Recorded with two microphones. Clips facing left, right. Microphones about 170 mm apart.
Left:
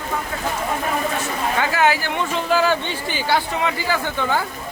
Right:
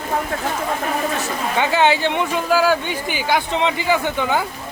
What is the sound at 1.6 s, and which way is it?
Speech, 25° right (ahead or behind).